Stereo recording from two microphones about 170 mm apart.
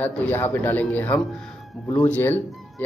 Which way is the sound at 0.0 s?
10° left (ahead or behind).